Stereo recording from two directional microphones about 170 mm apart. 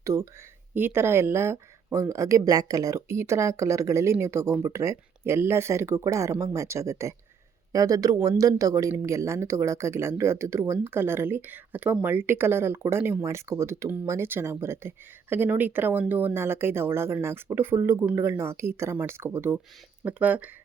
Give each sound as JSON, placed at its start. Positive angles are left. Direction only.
{"t": 0.0, "sound": "speech", "side_deg": -15}